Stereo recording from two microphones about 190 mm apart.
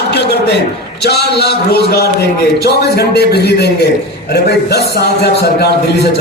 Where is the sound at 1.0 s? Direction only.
60° left (ahead or behind).